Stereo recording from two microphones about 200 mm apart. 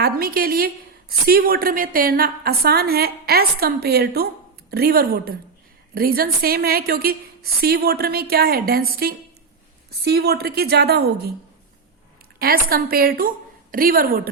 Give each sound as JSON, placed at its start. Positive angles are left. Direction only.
{"t": 0.0, "sound": "a woman's voice", "side_deg": -45}
{"t": 12.4, "sound": "a woman's voice", "side_deg": -45}